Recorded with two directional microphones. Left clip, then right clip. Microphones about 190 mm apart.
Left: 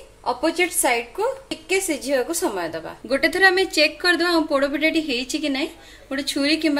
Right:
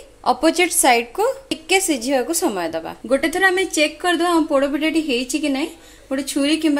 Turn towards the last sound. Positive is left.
turn(degrees=-30)  # may be behind; listen again after turning